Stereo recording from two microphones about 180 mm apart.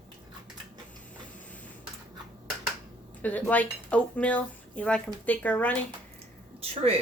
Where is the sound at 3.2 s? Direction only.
10° left (ahead or behind).